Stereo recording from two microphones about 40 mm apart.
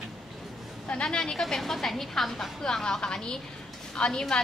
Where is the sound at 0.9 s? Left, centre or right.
Left.